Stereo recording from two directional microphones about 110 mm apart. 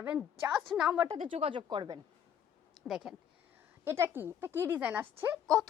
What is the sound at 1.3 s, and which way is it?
Speech, 50° right (ahead or behind).